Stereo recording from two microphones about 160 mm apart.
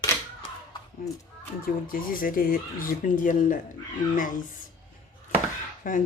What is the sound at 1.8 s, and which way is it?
Speech, 60° left (ahead or behind).